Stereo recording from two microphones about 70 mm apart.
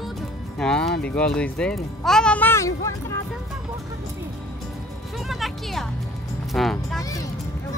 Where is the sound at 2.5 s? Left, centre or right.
Left.